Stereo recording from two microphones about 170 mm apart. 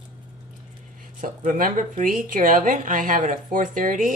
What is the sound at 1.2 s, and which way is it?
Speech, 50° right (ahead or behind).